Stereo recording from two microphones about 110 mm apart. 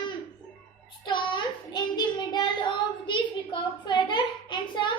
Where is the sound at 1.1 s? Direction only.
45° left (ahead or behind).